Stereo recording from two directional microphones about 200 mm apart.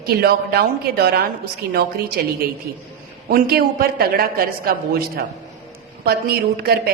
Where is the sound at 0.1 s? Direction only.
50° right (ahead or behind).